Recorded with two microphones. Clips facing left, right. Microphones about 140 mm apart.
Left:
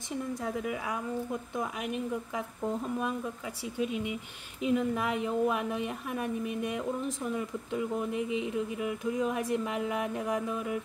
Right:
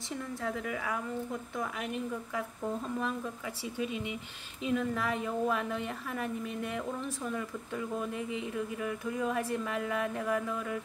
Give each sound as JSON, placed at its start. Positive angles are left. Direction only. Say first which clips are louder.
{"t": 0.3, "sound": "a woman's voice", "louder": "left 1 dB", "side_deg": 15}